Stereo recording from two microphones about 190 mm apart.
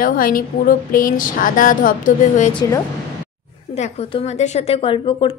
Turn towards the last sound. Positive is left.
turn(degrees=30)  # may be behind; listen again after turning